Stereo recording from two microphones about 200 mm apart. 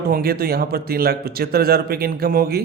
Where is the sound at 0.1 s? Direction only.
50° right (ahead or behind).